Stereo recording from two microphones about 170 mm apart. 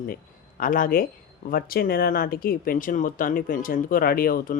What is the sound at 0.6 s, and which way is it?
Speech, 55° left (ahead or behind).